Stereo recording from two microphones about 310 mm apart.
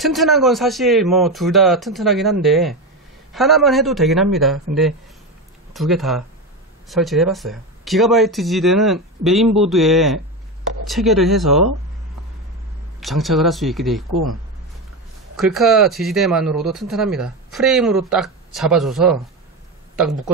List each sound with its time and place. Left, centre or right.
0.0 s speech: centre
13.0 s speech: centre
15.3 s speech: centre